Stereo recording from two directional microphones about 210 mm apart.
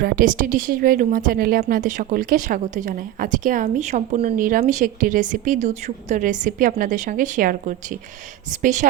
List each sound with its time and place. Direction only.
0.0 s a woman's voice: 40° right (ahead or behind)